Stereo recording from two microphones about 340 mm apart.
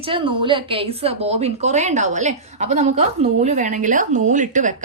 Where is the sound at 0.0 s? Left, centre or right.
Centre.